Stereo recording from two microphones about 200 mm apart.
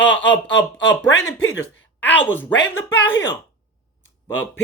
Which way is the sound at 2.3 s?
10° left (ahead or behind).